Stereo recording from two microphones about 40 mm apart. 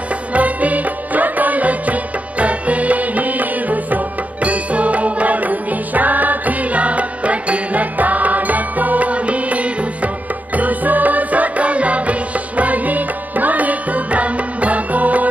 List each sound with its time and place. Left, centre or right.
0.3 s music: right